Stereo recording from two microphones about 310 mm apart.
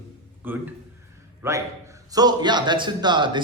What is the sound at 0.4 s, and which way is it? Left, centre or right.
A man's voice, centre.